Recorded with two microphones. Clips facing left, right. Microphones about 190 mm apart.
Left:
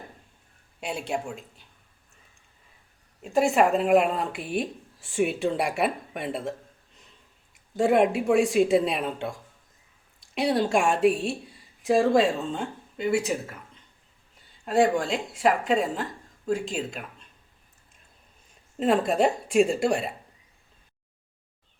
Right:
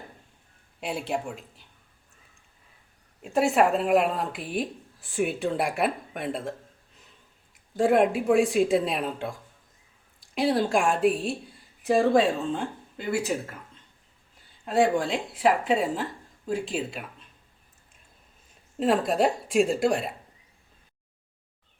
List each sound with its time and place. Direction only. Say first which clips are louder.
0.8 s speech: even; centre (ahead or behind)
3.2 s speech: left 1 dB; centre (ahead or behind)
7.8 s speech: even; centre (ahead or behind)
14.6 s speech: left 1 dB; centre (ahead or behind)
18.8 s speech: left 1 dB; centre (ahead or behind)